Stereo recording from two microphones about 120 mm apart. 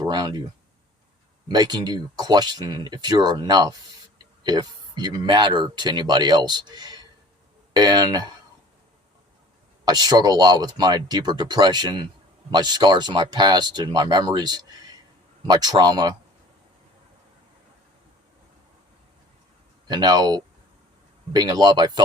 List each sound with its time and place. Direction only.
0.0 s speech: 40° right (ahead or behind)
1.5 s speech: 35° right (ahead or behind)
9.8 s speech: 35° right (ahead or behind)
19.9 s speech: 35° right (ahead or behind)